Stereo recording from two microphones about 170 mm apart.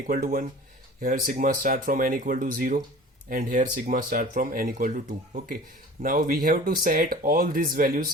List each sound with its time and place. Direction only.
0.1 s speech: 55° right (ahead or behind)